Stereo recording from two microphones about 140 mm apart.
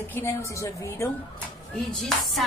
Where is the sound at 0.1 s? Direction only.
20° left (ahead or behind).